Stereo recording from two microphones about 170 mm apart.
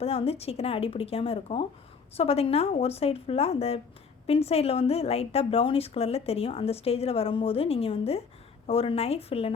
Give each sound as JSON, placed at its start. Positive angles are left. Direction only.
{"t": 0.0, "sound": "a woman's voice", "side_deg": 35}